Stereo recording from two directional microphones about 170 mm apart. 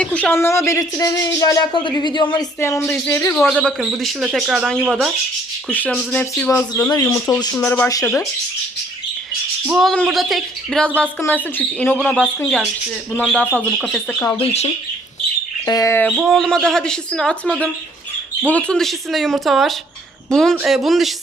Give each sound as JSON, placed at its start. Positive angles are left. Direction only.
{"t": 0.0, "sound": "speech", "side_deg": 10}
{"t": 2.6, "sound": "speech", "side_deg": 15}
{"t": 3.5, "sound": "speech", "side_deg": 0}
{"t": 5.6, "sound": "speech", "side_deg": 10}
{"t": 9.6, "sound": "speech", "side_deg": 0}
{"t": 14.2, "sound": "speech", "side_deg": 15}
{"t": 14.4, "sound": "speech", "side_deg": 40}
{"t": 15.6, "sound": "speech", "side_deg": 20}
{"t": 16.1, "sound": "speech", "side_deg": 0}